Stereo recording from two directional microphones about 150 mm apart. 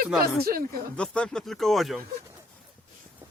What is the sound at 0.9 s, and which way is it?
Speech, 5° left (ahead or behind).